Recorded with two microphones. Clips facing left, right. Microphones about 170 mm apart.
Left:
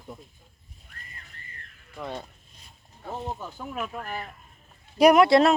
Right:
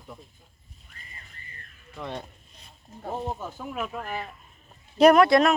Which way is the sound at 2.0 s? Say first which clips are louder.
Even; 5° left (ahead or behind).